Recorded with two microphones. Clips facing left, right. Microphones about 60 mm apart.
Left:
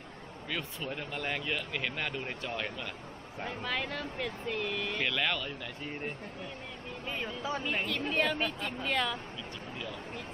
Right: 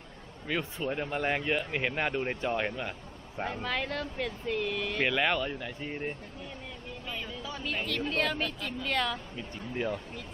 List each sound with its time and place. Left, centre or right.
0.4 s speech: centre
3.4 s speech: centre
3.7 s speech: centre
4.9 s speech: centre
7.1 s speech: left
7.9 s a woman's voice: centre
9.7 s speech: right